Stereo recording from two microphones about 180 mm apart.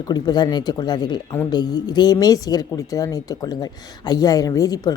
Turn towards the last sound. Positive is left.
turn(degrees=20)  # may be behind; listen again after turning